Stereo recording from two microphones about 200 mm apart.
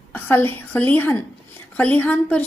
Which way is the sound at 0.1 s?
10° left (ahead or behind).